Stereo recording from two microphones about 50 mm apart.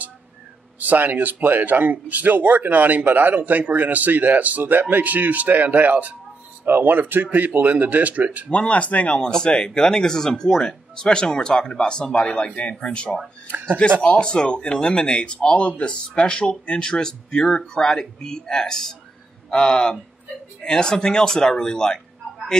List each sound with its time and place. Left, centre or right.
0.7 s speech: right
8.5 s speech: left
9.2 s speech: centre
13.5 s speech: right
14.0 s speech: centre